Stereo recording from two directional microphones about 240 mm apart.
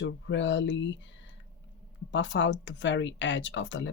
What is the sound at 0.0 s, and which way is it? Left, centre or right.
Speech, left.